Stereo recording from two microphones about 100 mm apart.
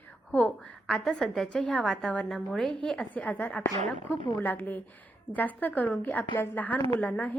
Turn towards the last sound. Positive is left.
turn(degrees=15)  # may be behind; listen again after turning